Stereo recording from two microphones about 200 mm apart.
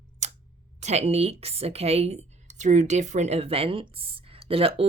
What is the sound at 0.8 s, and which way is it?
A woman's voice, 35° right (ahead or behind).